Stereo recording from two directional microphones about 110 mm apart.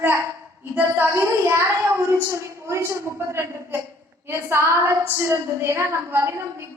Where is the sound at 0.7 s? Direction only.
20° right (ahead or behind).